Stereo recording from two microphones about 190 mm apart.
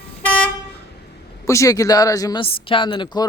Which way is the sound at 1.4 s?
15° left (ahead or behind).